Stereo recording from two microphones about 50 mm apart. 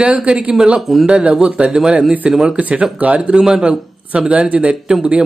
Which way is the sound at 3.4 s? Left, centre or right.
Centre.